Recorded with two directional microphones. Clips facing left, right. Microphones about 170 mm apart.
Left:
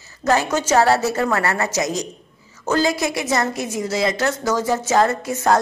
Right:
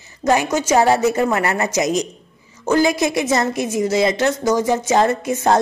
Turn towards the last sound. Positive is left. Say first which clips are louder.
# right 2 dB
turn(degrees=-20)  # may be behind; listen again after turning